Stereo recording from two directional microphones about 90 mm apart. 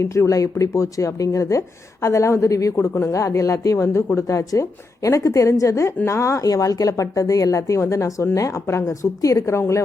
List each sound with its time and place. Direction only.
0.0 s speech: 35° left (ahead or behind)